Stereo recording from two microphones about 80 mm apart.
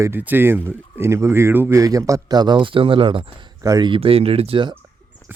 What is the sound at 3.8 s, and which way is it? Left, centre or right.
Speech, right.